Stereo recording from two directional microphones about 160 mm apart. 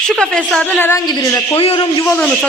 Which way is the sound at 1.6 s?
35° left (ahead or behind).